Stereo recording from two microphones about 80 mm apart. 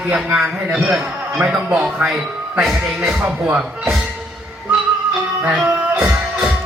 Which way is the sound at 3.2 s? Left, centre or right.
Centre.